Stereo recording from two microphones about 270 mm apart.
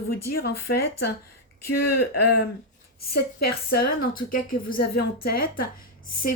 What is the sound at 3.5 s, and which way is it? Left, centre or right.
A woman's voice, left.